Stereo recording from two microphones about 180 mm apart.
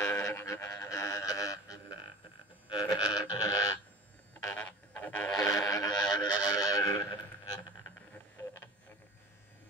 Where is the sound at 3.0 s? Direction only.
20° left (ahead or behind).